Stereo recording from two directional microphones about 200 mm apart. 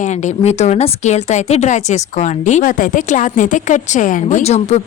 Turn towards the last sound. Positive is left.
turn(degrees=35)  # may be behind; listen again after turning